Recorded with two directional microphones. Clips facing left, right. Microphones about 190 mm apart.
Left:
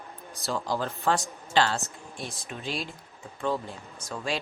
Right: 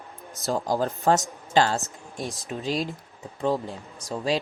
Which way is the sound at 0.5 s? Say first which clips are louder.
Right 5 dB; 45° right (ahead or behind).